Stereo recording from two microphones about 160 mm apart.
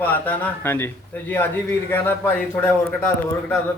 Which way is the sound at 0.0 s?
10° left (ahead or behind).